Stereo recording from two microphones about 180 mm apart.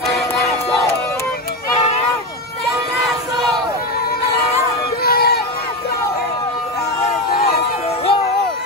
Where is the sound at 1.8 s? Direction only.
35° left (ahead or behind).